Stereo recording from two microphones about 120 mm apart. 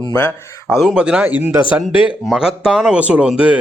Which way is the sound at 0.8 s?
5° right (ahead or behind).